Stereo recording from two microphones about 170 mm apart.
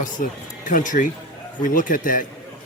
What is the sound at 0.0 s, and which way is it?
Speech, 50° left (ahead or behind).